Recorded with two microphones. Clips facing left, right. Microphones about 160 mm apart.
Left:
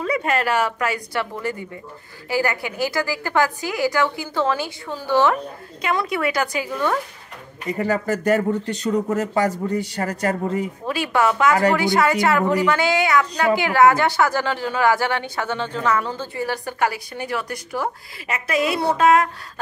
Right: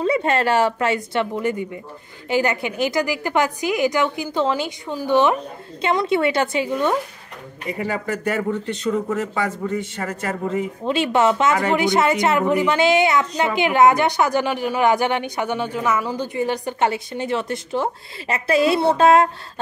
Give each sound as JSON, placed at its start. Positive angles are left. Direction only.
{"t": 0.0, "sound": "a woman's voice", "side_deg": -30}
{"t": 7.7, "sound": "speech", "side_deg": 40}
{"t": 10.9, "sound": "a woman's voice", "side_deg": -25}